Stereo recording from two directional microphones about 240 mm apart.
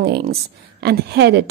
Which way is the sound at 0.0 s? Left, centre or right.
Right.